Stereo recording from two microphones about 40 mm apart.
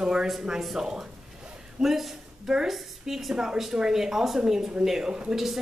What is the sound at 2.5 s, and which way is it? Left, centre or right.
A woman's voice, centre.